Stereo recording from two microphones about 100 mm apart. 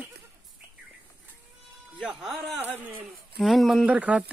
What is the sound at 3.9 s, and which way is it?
Speech, 15° right (ahead or behind).